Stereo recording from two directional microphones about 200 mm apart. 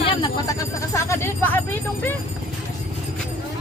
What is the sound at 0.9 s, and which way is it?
Speech, 10° left (ahead or behind).